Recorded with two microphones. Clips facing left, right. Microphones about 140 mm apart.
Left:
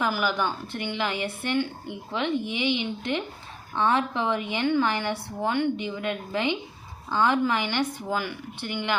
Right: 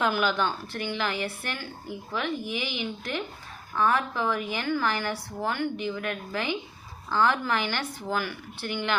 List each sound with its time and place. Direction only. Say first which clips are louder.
0.0 s a woman's voice: even; 10° left (ahead or behind)